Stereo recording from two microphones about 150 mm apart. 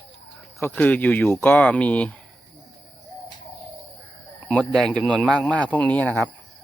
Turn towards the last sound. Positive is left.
turn(degrees=10)  # may be behind; listen again after turning